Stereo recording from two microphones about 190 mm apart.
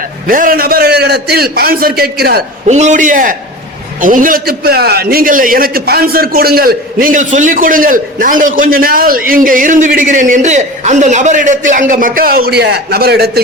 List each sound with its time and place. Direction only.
0.3 s a man's voice: 45° right (ahead or behind)
2.6 s a man's voice: 40° right (ahead or behind); by 13.4 s 55° right (ahead or behind)